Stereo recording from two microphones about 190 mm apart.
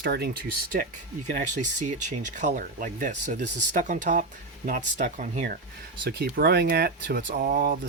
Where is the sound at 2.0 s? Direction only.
40° right (ahead or behind).